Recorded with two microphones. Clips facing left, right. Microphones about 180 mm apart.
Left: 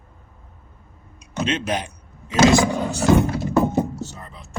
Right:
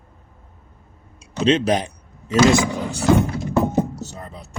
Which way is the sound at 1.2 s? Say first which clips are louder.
Right 6 dB; 35° right (ahead or behind).